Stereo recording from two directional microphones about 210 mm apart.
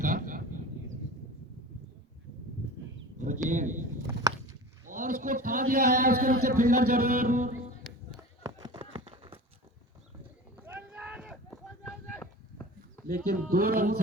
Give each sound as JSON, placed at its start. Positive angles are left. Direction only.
{"t": 0.0, "sound": "a sound", "side_deg": -40}
{"t": 3.2, "sound": "speech", "side_deg": -35}
{"t": 4.9, "sound": "a man's voice", "side_deg": -40}
{"t": 8.1, "sound": "run", "side_deg": -20}
{"t": 10.6, "sound": "run", "side_deg": -10}
{"t": 13.1, "sound": "a man's voice", "side_deg": -45}